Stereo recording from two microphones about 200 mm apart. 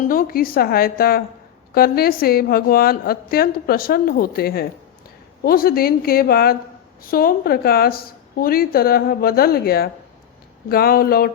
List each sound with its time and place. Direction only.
0.1 s a woman's voice: 45° left (ahead or behind)